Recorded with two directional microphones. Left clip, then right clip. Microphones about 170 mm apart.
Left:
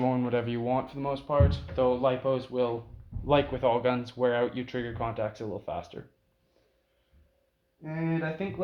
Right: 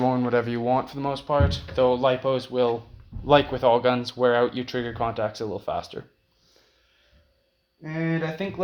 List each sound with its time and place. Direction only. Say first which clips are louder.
0.0 s speech: right 6 dB; 20° right (ahead or behind); by 6.0 s 40° right (ahead or behind)
7.8 s speech: right 5 dB; 50° right (ahead or behind)